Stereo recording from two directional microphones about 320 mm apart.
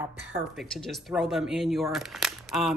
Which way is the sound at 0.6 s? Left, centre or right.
Centre.